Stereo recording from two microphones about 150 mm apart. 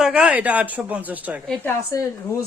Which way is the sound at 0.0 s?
10° right (ahead or behind).